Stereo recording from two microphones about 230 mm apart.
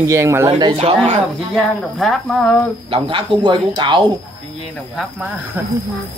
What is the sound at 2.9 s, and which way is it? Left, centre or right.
Speech, right.